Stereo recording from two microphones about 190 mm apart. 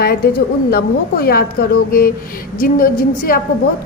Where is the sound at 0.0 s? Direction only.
55° left (ahead or behind).